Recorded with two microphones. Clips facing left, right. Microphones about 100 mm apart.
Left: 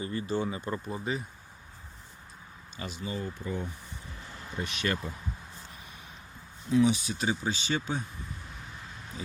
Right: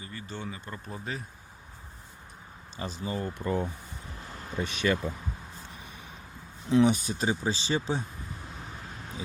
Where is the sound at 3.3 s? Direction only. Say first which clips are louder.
Right 6 dB; 80° right.